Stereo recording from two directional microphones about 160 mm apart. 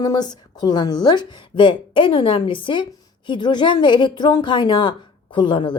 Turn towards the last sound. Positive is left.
turn(degrees=30)  # may be behind; listen again after turning